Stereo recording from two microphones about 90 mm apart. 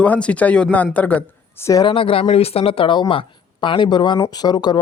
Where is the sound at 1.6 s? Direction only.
35° left (ahead or behind).